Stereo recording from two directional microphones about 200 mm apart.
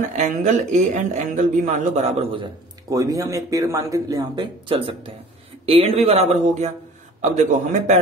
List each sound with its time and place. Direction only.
0.2 s speech: 35° right (ahead or behind)
2.9 s speech: 15° right (ahead or behind); by 8.0 s 40° right (ahead or behind)